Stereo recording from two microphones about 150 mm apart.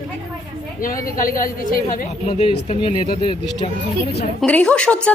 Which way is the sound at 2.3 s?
40° left (ahead or behind).